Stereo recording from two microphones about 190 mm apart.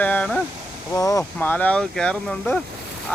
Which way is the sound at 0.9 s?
15° left (ahead or behind).